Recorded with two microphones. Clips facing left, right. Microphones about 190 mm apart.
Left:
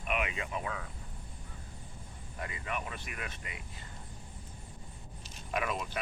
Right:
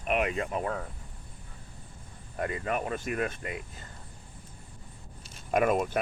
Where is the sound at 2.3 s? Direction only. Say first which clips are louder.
Right 8 dB; 50° right (ahead or behind).